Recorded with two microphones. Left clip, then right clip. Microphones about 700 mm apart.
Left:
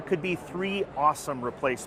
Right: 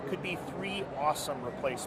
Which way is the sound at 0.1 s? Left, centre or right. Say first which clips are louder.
Left 9 dB; left.